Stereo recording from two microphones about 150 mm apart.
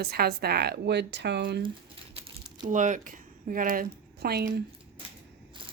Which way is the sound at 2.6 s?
55° right (ahead or behind).